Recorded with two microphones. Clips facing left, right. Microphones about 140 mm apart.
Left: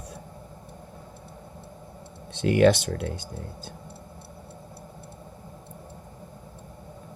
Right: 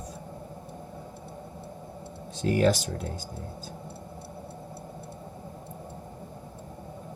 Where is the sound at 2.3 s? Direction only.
75° left (ahead or behind).